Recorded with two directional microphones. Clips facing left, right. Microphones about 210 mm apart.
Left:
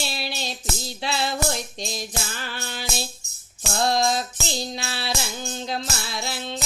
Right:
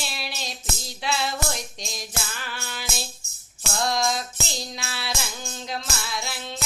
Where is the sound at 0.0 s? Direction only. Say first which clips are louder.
Left 4 dB; 30° left (ahead or behind).